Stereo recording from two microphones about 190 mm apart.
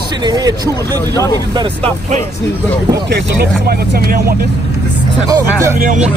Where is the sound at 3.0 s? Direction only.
60° right (ahead or behind).